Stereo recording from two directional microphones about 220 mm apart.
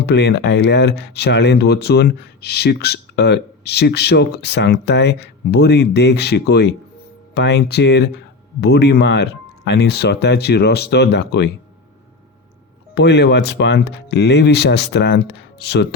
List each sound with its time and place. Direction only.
0.0 s speech: 50° left (ahead or behind)
12.9 s speech: 50° left (ahead or behind)